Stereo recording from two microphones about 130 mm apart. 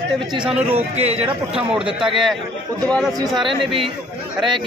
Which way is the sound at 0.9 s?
55° right (ahead or behind).